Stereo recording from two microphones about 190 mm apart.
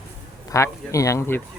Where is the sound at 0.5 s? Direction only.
15° left (ahead or behind).